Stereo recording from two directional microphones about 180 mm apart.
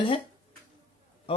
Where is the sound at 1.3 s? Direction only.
30° left (ahead or behind).